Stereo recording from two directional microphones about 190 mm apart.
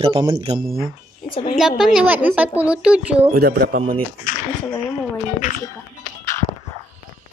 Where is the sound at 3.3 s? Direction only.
55° right (ahead or behind).